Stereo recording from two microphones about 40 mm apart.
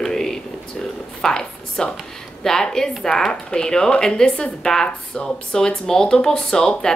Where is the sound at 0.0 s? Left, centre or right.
Centre.